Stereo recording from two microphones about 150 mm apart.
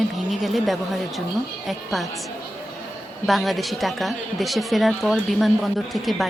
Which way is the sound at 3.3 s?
Centre (ahead or behind).